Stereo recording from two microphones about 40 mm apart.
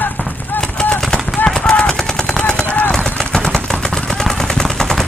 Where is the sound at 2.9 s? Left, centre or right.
Centre.